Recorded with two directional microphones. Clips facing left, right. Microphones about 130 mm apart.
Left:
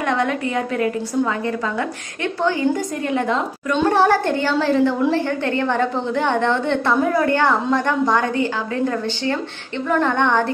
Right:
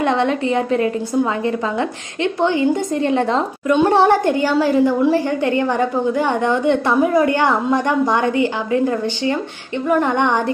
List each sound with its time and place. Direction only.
0.0 s a woman's voice: 25° right (ahead or behind)
3.7 s a woman's voice: 20° right (ahead or behind)